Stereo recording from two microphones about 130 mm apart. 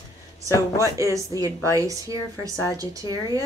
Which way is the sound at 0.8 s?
25° right (ahead or behind).